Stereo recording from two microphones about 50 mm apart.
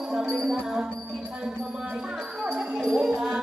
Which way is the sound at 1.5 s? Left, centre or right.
Centre.